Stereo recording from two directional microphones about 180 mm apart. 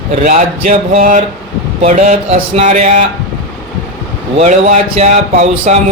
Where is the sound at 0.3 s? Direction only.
40° right (ahead or behind).